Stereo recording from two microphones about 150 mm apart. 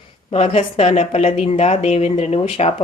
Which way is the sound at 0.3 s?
40° left (ahead or behind).